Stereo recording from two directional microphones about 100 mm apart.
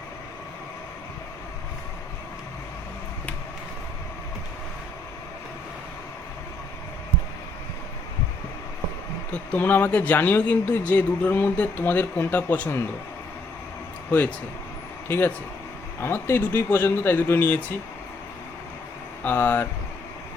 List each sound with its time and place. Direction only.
9.3 s speech: 15° left (ahead or behind)
14.1 s speech: 15° left (ahead or behind)
19.2 s speech: 20° left (ahead or behind)